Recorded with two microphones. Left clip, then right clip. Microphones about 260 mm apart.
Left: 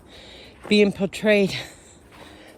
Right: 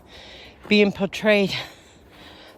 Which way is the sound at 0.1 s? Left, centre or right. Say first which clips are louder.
Right 1 dB; centre.